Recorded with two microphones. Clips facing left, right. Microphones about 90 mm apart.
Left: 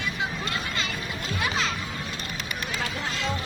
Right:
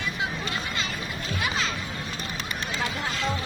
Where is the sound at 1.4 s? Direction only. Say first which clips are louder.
Left 1 dB; centre (ahead or behind).